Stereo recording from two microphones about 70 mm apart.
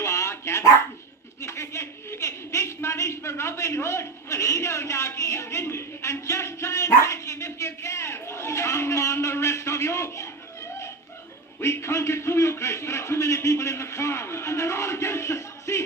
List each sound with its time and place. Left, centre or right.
0.0 s dog: left
1.4 s a woman's voice: left